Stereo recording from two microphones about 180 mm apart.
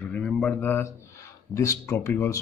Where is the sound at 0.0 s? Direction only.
5° left (ahead or behind).